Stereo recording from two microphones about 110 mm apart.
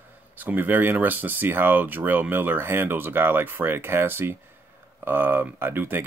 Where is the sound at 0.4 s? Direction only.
15° right (ahead or behind).